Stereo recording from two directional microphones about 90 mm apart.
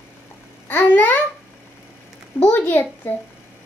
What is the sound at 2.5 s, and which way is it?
Speech, 20° left (ahead or behind).